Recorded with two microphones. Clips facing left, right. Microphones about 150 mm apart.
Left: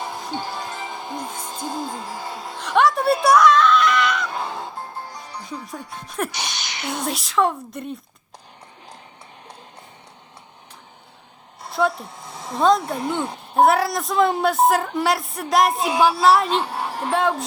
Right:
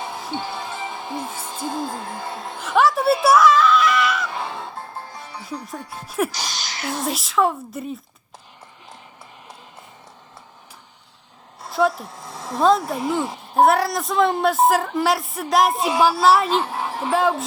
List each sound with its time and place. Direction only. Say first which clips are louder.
0.0 s music: even; centre (ahead or behind)
0.4 s music: right 1 dB; 40° left (ahead or behind)
0.8 s music: right 1 dB; centre (ahead or behind)
5.9 s speech: right 4 dB; 5° right (ahead or behind)
11.6 s speech: right 2 dB; centre (ahead or behind)